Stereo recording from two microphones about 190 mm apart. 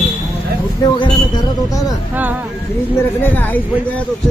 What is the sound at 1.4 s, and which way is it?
Speech, 20° left (ahead or behind).